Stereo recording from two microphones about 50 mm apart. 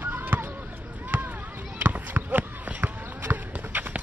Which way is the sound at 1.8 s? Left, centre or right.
Right.